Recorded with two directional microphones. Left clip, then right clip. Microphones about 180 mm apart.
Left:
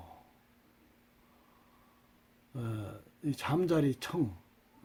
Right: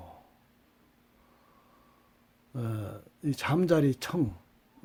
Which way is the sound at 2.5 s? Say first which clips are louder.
Right 4 dB; 40° right (ahead or behind).